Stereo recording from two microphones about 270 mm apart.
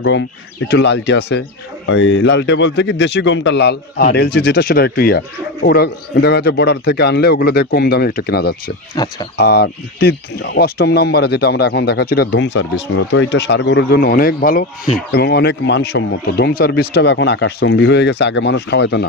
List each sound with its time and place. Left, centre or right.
0.7 s speech: left
8.9 s speech: centre
9.4 s speech: left